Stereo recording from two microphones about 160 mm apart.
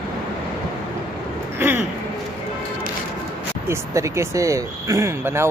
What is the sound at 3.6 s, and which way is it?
Speech, 20° right (ahead or behind).